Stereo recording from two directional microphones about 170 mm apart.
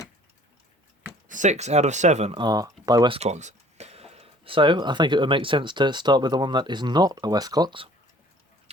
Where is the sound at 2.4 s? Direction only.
25° right (ahead or behind).